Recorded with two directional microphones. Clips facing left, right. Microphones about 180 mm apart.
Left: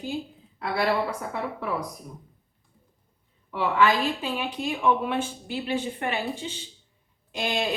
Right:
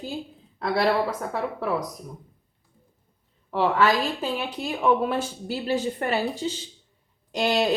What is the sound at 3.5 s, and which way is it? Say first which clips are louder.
Speech: right 1 dB; 40° right (ahead or behind).